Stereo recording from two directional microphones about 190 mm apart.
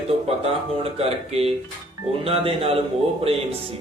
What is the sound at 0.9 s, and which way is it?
Mantra, 30° right (ahead or behind).